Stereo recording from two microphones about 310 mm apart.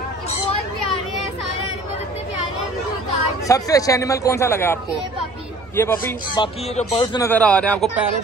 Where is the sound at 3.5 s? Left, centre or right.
Centre.